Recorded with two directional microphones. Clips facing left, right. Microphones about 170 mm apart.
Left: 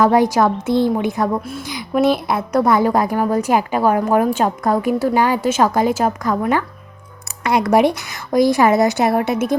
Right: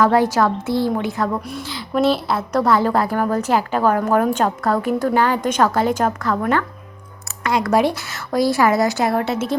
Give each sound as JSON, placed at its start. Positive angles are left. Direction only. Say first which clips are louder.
{"t": 0.0, "sound": "a woman's voice", "louder": "left 2 dB", "side_deg": 15}